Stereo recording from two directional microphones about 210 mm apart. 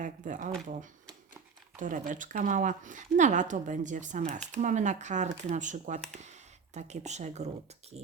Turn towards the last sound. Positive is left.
turn(degrees=-30)  # may be behind; listen again after turning